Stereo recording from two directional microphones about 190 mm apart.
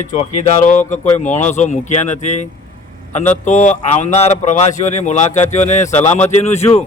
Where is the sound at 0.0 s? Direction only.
40° left (ahead or behind).